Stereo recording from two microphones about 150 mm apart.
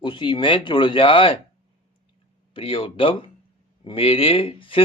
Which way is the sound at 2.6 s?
35° left (ahead or behind).